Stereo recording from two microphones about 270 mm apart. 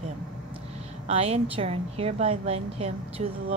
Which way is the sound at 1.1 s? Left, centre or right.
Right.